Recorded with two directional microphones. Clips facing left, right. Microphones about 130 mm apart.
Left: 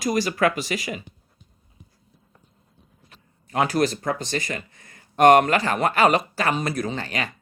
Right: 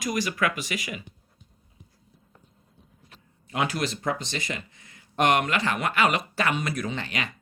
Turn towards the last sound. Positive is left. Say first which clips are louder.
# left 3 dB
turn(degrees=40)  # may be behind; listen again after turning